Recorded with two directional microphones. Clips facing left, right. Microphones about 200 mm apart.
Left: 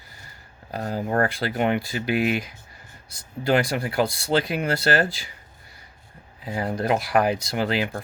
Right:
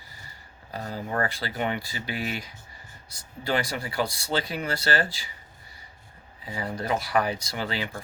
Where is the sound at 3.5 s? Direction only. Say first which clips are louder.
Left 6 dB; 60° left (ahead or behind).